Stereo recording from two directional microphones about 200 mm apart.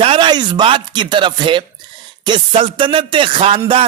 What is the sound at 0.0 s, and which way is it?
A man's voice, 25° right (ahead or behind).